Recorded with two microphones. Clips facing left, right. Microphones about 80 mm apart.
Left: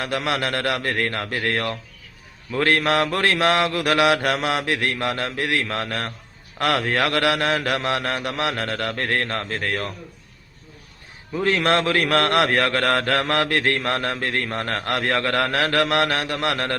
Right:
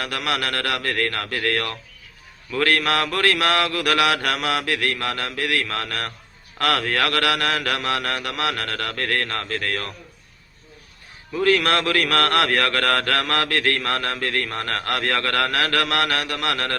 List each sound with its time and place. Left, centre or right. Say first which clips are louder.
0.0 s a man's voice: left 2 dB; left
11.3 s a man's voice: right 1 dB; left